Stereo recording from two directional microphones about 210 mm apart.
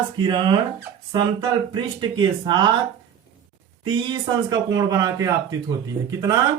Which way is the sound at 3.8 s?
20° right (ahead or behind).